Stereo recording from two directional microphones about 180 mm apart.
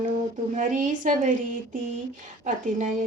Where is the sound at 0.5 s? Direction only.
45° right (ahead or behind).